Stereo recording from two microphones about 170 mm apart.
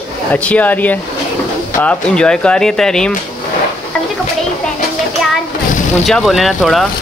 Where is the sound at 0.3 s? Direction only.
10° left (ahead or behind).